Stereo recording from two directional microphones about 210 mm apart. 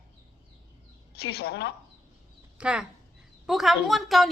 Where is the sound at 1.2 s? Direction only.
50° left (ahead or behind).